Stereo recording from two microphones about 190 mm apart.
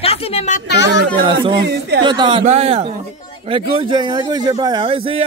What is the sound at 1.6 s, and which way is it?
Speech, 60° right (ahead or behind).